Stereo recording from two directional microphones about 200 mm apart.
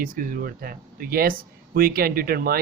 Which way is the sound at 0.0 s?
45° right (ahead or behind).